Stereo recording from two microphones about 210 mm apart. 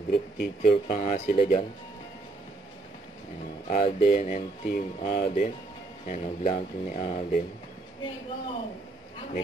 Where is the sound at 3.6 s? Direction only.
30° left (ahead or behind).